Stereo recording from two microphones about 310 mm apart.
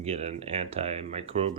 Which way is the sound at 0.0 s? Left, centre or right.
Centre.